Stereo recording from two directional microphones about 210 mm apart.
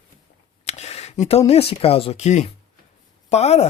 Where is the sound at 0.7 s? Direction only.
30° left (ahead or behind).